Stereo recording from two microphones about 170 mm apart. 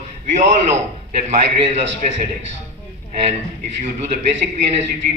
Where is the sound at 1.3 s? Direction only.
40° right (ahead or behind).